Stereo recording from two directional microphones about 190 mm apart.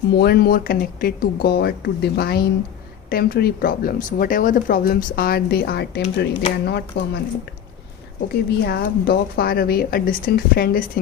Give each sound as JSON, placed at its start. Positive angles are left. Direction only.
{"t": 0.2, "sound": "speech", "side_deg": 55}
{"t": 8.3, "sound": "speech", "side_deg": 60}